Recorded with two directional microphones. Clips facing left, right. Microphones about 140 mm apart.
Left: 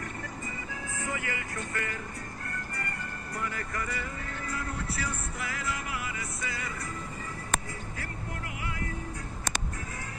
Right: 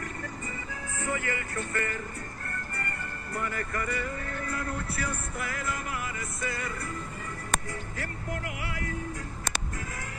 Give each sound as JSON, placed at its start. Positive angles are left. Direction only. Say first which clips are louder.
{"t": 1.0, "sound": "music", "louder": "right 4 dB", "side_deg": -55}
{"t": 3.3, "sound": "speech", "louder": "right 3 dB", "side_deg": -50}
{"t": 8.5, "sound": "music", "louder": "right 1 dB", "side_deg": -75}